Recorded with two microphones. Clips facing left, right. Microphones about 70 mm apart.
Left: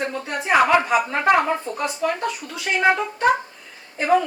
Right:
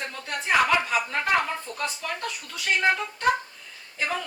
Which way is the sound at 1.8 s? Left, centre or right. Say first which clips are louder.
Left 6 dB; centre.